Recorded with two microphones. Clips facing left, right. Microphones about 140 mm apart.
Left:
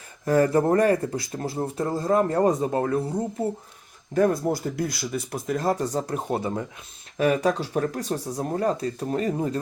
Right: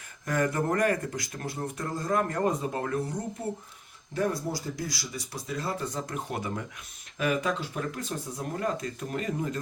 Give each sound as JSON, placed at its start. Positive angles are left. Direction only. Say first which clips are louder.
{"t": 0.3, "sound": "speech", "louder": "left 8 dB", "side_deg": 30}
{"t": 4.1, "sound": "speech", "louder": "left 8 dB", "side_deg": 50}
{"t": 8.1, "sound": "speech", "louder": "left 7 dB", "side_deg": 75}
{"t": 8.4, "sound": "speech", "louder": "left 6 dB", "side_deg": 35}